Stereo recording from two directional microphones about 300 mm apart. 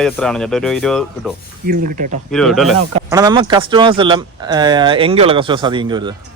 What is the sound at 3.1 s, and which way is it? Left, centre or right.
Speech, centre.